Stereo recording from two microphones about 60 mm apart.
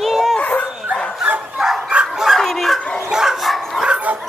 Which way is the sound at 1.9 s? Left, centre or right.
Centre.